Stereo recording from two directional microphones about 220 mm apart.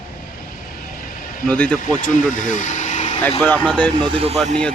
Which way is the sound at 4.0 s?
25° right (ahead or behind).